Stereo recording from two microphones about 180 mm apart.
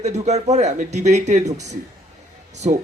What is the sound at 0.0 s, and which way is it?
Speech, 40° right (ahead or behind).